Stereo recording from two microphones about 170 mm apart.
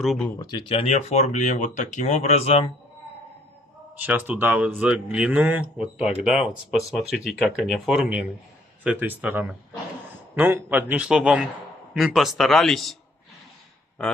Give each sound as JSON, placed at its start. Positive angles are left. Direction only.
{"t": 0.0, "sound": "speech", "side_deg": 0}
{"t": 0.4, "sound": "speech", "side_deg": 25}
{"t": 3.9, "sound": "a man's voice", "side_deg": -10}